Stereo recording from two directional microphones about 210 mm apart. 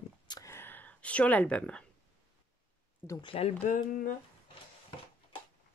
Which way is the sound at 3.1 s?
25° left (ahead or behind).